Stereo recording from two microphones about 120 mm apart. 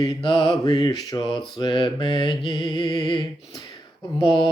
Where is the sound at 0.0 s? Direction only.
40° left (ahead or behind).